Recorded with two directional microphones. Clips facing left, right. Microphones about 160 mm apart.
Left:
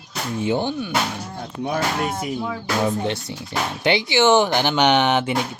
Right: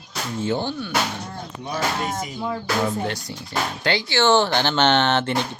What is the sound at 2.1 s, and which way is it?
Speech, 5° left (ahead or behind).